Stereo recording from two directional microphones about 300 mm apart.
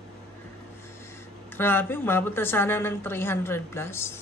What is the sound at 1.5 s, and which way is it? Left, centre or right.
Speech, centre.